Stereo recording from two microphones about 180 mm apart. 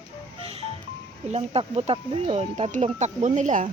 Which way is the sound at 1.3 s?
35° right (ahead or behind).